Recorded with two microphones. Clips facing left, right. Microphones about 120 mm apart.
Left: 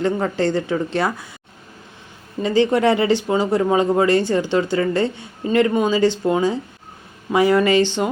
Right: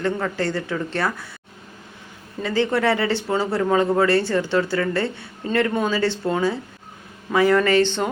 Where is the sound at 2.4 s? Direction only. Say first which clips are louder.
Left 4 dB; 20° left (ahead or behind).